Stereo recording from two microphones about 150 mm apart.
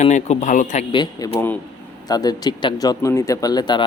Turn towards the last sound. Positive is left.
turn(degrees=25)  # may be behind; listen again after turning